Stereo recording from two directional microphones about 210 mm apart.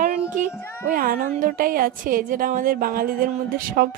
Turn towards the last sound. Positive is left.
turn(degrees=-45)  # may be behind; listen again after turning